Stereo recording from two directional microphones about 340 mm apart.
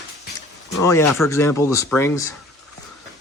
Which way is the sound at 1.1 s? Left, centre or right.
Centre.